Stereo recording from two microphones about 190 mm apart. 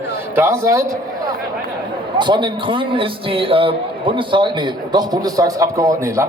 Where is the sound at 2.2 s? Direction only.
25° right (ahead or behind).